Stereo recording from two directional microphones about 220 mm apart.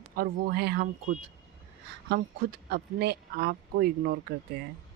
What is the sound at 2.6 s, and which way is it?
A woman's voice, 45° right (ahead or behind).